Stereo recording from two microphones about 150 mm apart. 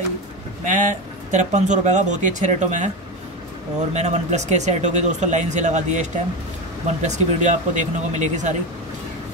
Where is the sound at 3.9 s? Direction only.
50° right (ahead or behind).